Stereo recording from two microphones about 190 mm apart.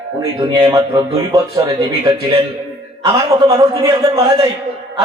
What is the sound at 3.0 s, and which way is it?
A man's voice, 15° right (ahead or behind).